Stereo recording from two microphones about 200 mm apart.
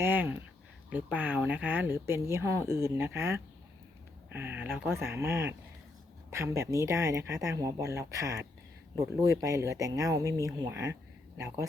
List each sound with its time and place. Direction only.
0.0 s speech: 10° right (ahead or behind)